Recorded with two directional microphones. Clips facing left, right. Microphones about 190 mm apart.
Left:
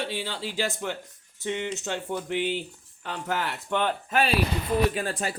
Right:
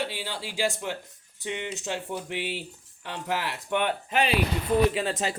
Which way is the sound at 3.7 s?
15° right (ahead or behind).